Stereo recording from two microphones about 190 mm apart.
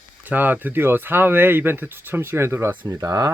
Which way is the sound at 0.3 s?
10° right (ahead or behind).